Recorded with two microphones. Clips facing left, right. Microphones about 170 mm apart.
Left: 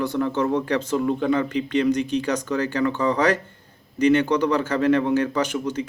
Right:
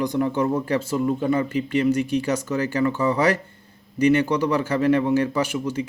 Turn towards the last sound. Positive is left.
turn(degrees=-10)  # may be behind; listen again after turning